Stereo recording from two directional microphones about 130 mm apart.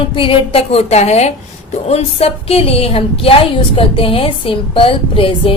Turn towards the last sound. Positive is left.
turn(degrees=45)  # may be behind; listen again after turning